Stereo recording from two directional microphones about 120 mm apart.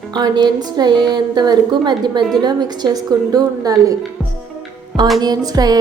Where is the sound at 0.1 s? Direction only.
35° right (ahead or behind).